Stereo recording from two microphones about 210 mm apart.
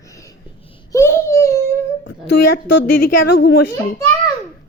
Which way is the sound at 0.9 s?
10° left (ahead or behind).